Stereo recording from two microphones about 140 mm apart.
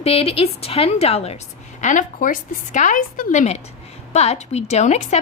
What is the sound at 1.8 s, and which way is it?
A woman's voice, 65° left (ahead or behind).